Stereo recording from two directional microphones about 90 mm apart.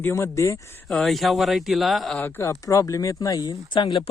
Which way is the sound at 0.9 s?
Centre (ahead or behind).